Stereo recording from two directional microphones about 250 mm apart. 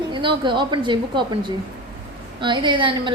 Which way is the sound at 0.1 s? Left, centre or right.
Centre.